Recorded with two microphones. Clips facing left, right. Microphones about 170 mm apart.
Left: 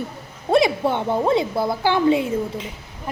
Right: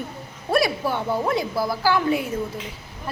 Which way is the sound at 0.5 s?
25° left (ahead or behind).